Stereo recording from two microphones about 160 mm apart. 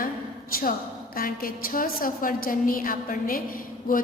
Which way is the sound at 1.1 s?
65° left (ahead or behind).